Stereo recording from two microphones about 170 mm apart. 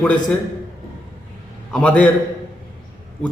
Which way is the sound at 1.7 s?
5° left (ahead or behind).